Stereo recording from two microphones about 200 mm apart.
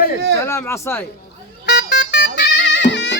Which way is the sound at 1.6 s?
55° left (ahead or behind).